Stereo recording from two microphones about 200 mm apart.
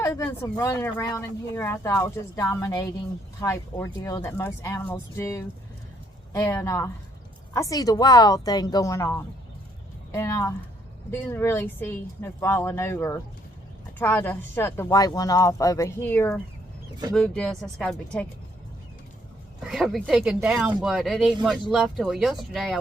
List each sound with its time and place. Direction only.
0.0 s a woman's voice: 15° left (ahead or behind)
19.6 s speech: centre (ahead or behind)